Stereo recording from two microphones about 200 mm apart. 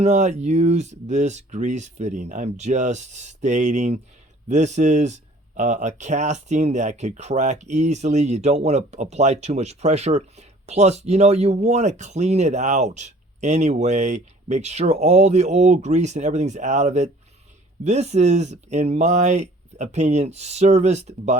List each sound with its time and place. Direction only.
0.0 s speech: 35° right (ahead or behind)